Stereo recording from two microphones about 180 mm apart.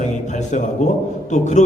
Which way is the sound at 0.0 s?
40° left (ahead or behind).